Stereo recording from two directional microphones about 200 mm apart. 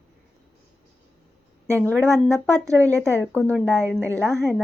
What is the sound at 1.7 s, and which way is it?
Speech, 5° left (ahead or behind).